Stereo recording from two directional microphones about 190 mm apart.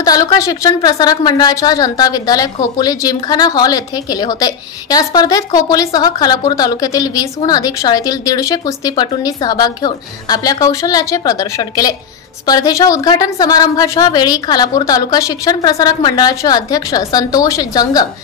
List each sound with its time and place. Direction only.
0.0 s a woman's voice: 20° left (ahead or behind)